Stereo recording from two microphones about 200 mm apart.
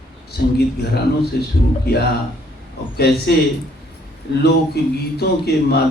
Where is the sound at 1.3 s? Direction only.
55° left (ahead or behind).